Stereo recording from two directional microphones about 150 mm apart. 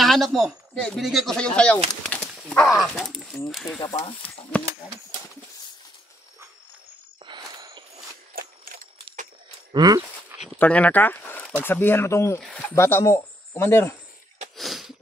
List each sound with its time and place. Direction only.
0.0 s speech: centre (ahead or behind)
2.0 s dog: 5° left (ahead or behind)
2.8 s speech: centre (ahead or behind)
3.9 s speech: 40° left (ahead or behind)
7.2 s a sound: 30° right (ahead or behind)
8.4 s a sound: 70° right (ahead or behind)
9.7 s speech: 25° right (ahead or behind)
10.6 s speech: 10° left (ahead or behind)
12.4 s speech: centre (ahead or behind)
12.7 s speech: 20° left (ahead or behind)
14.6 s sneeze: centre (ahead or behind)